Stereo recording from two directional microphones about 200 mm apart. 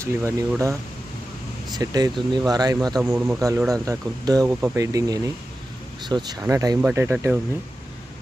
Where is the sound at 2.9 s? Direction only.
5° right (ahead or behind).